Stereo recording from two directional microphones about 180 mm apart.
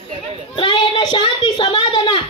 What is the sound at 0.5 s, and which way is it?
A child's voice, 25° left (ahead or behind).